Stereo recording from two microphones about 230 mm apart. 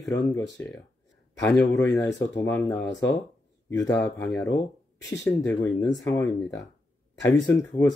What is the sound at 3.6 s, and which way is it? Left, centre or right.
Speech, centre.